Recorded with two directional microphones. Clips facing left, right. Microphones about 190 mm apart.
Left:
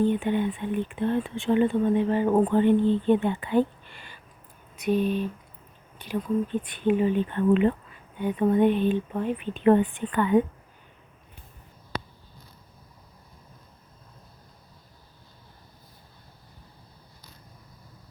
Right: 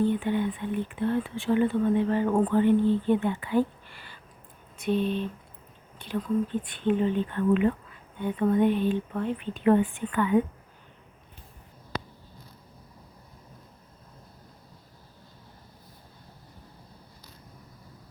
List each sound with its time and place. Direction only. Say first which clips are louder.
0.0 s speech: left 2 dB; 20° left (ahead or behind)
9.6 s a woman's voice: left 2 dB; 35° left (ahead or behind)